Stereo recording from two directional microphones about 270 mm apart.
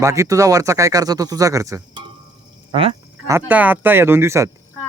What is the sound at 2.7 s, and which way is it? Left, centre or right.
Frog, right.